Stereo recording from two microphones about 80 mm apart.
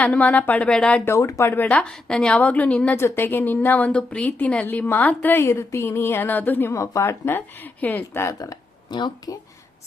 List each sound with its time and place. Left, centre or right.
0.0 s a woman's voice: centre
1.0 s speech: left
1.5 s a woman's voice: centre
2.9 s a woman's voice: left
6.7 s a woman's voice: left
8.3 s speech: left
8.9 s speech: left